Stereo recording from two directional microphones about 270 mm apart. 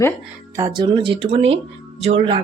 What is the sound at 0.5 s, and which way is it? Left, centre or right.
Speech, centre.